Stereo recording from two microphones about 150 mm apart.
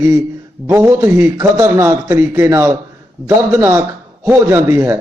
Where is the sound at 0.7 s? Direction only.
20° right (ahead or behind).